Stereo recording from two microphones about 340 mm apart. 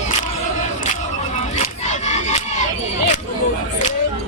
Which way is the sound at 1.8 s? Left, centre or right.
Centre.